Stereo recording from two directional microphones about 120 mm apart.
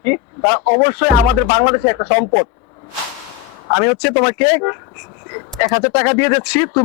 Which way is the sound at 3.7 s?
20° left (ahead or behind).